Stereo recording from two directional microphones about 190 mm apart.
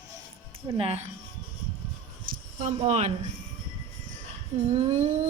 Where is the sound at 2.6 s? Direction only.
35° right (ahead or behind).